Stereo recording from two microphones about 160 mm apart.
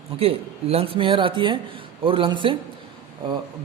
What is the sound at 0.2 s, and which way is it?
A man's voice, 35° right (ahead or behind).